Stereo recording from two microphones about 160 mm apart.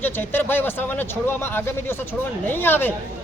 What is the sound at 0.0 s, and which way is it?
A man's voice, 10° left (ahead or behind).